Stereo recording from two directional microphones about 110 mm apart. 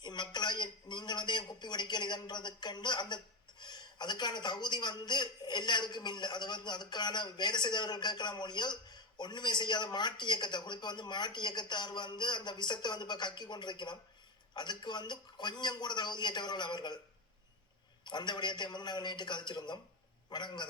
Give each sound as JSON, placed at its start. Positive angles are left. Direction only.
{"t": 0.0, "sound": "speech", "side_deg": 40}
{"t": 18.0, "sound": "a man's voice", "side_deg": 40}